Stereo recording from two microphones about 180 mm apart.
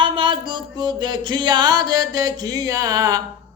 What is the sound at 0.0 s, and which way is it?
Music, 25° right (ahead or behind).